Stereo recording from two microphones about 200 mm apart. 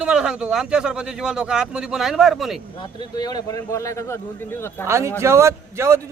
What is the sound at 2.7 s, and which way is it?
A man's voice, 20° left (ahead or behind).